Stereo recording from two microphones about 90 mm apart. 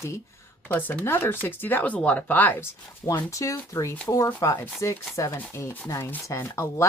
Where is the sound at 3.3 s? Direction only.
35° left (ahead or behind).